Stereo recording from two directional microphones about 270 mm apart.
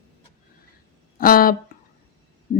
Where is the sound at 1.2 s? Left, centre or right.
Left.